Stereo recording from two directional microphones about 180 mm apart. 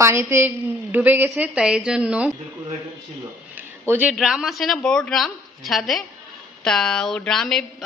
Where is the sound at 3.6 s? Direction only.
10° right (ahead or behind).